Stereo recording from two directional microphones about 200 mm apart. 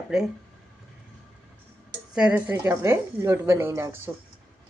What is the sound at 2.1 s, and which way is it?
Speech, 5° right (ahead or behind).